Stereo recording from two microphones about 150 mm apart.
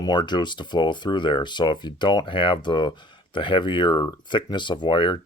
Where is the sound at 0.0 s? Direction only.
30° left (ahead or behind).